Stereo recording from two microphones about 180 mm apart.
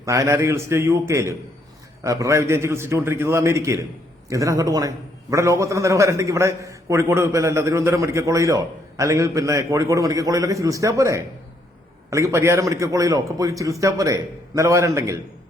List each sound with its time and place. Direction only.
0.0 s a man's voice: 15° right (ahead or behind)